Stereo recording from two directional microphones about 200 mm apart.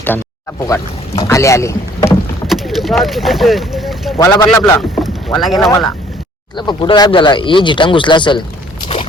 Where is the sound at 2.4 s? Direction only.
Centre (ahead or behind).